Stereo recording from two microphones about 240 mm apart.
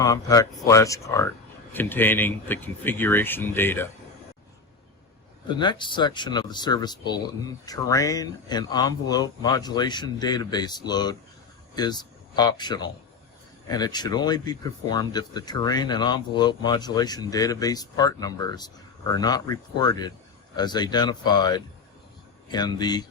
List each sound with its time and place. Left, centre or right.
0.0 s speech: centre
5.5 s speech: centre